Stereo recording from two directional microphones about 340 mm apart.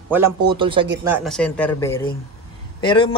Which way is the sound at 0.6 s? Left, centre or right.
Centre.